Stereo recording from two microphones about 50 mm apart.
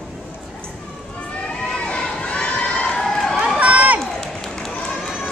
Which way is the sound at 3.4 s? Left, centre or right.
Right.